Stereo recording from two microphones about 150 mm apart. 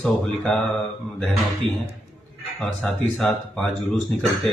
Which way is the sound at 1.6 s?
35° right (ahead or behind).